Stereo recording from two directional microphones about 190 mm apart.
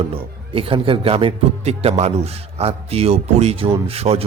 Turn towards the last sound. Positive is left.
turn(degrees=-30)  # may be behind; listen again after turning